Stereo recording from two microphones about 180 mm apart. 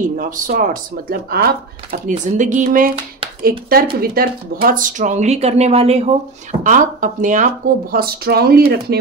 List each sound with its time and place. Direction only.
0.2 s a woman's voice: 50° right (ahead or behind); by 6.1 s 35° right (ahead or behind)
6.6 s speech: 45° right (ahead or behind)